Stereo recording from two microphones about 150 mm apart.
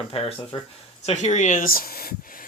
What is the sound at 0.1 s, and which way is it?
Speech, 40° left (ahead or behind).